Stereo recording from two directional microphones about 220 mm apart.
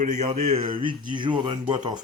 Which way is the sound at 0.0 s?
30° right (ahead or behind).